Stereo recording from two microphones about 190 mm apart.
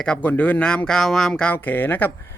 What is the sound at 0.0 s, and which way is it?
A man's voice, 5° left (ahead or behind).